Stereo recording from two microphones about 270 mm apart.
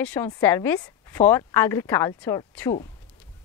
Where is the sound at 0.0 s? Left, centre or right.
Centre.